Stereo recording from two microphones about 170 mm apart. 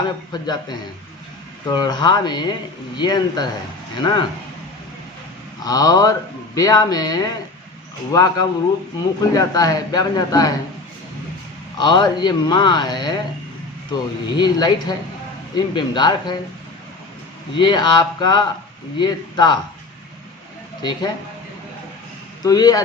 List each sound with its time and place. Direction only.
1.6 s a man's voice: 25° left (ahead or behind)
5.6 s a man's voice: 20° left (ahead or behind)
11.8 s a man's voice: 25° left (ahead or behind)
17.6 s a man's voice: 25° left (ahead or behind)
22.4 s a man's voice: 20° left (ahead or behind)